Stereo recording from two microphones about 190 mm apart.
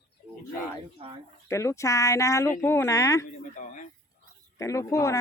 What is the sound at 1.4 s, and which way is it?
Speech, 15° left (ahead or behind).